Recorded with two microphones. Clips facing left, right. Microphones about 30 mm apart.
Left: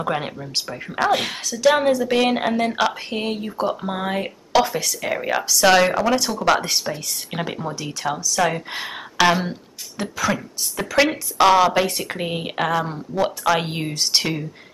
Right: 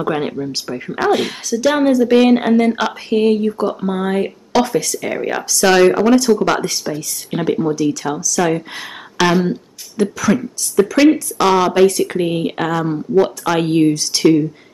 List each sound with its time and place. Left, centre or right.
0.0 s speech: centre
6.6 s speech: centre
7.3 s speech: centre